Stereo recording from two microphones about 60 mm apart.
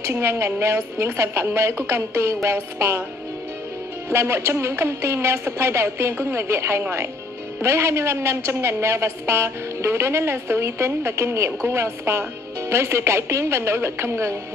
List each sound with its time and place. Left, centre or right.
0.1 s a woman's voice: right
4.1 s a woman's voice: right